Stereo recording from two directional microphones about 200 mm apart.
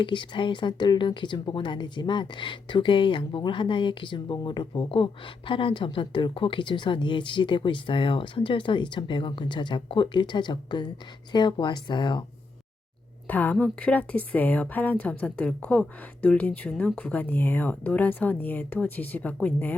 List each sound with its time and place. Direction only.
0.0 s speech: 25° left (ahead or behind)
13.2 s a woman's voice: 10° left (ahead or behind)